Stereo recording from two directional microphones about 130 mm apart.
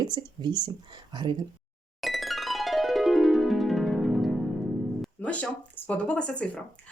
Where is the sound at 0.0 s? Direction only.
35° right (ahead or behind).